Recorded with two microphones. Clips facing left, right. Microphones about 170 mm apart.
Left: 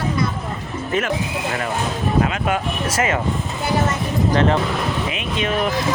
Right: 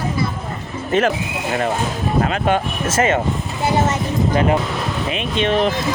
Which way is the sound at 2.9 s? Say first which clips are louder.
Right 5 dB; 30° right (ahead or behind).